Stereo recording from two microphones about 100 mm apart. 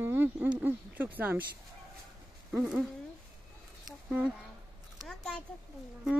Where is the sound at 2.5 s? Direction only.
5° right (ahead or behind).